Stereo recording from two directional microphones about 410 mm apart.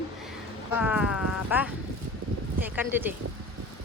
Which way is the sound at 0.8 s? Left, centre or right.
Centre.